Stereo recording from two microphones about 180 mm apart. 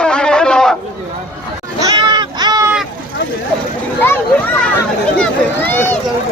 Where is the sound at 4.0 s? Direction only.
10° left (ahead or behind).